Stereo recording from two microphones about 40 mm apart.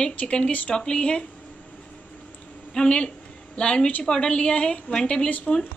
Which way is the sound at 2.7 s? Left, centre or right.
Centre.